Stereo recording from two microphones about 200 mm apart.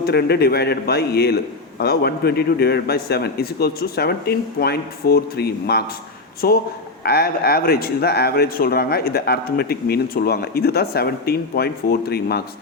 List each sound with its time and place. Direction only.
0.0 s speech: 55° left (ahead or behind)